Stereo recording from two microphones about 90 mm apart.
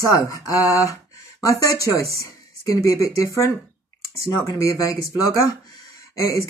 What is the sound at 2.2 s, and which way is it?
Speech, 40° left (ahead or behind).